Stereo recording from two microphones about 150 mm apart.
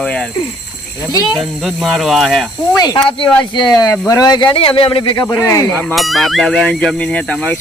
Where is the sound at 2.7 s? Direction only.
25° left (ahead or behind).